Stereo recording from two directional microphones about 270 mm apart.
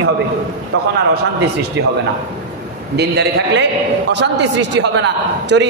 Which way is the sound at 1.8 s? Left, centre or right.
Right.